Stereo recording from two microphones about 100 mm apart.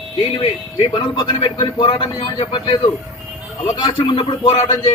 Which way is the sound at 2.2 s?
75° left (ahead or behind).